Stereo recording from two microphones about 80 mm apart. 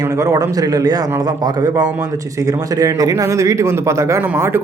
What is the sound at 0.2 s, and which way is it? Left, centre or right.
Speech, right.